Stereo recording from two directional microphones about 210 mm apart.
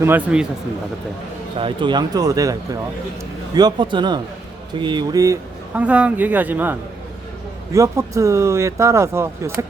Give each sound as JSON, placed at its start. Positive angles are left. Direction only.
{"t": 0.0, "sound": "speech", "side_deg": -10}
{"t": 1.5, "sound": "speech", "side_deg": -25}